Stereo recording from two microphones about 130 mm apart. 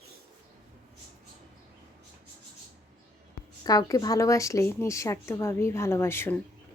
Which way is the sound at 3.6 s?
30° left (ahead or behind).